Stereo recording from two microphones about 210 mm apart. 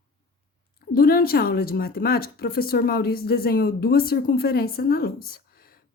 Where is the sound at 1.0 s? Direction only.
45° left (ahead or behind).